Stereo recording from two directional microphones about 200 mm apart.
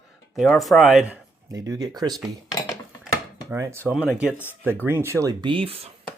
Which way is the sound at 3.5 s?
10° right (ahead or behind).